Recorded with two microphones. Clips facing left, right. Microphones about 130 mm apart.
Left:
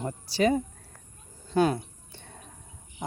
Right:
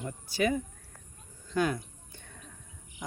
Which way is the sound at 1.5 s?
30° left (ahead or behind).